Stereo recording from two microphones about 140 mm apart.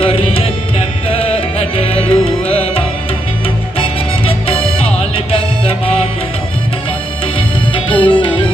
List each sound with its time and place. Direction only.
0.0 s music: 40° left (ahead or behind)
4.5 s music: 40° left (ahead or behind)
7.3 s music: 35° left (ahead or behind)